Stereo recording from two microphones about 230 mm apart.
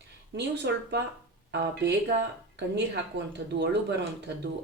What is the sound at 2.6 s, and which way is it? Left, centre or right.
Speech, right.